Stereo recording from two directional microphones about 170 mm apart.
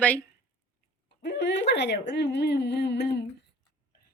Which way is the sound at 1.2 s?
85° left.